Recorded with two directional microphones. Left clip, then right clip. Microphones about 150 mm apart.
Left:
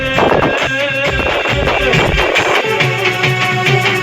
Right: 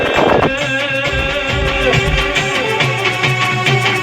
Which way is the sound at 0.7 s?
5° right (ahead or behind).